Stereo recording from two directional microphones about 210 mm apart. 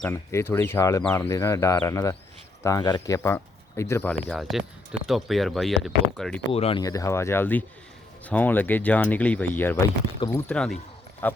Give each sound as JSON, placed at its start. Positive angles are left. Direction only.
{"t": 0.0, "sound": "speech", "side_deg": 10}
{"t": 6.5, "sound": "speech", "side_deg": 25}
{"t": 6.8, "sound": "speech", "side_deg": 15}